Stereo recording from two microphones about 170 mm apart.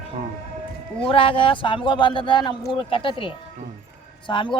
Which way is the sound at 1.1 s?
30° left (ahead or behind).